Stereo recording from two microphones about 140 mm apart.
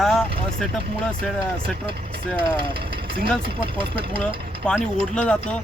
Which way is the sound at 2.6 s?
40° right (ahead or behind).